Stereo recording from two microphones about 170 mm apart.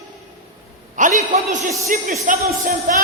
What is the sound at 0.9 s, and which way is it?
A man's voice, 50° right (ahead or behind).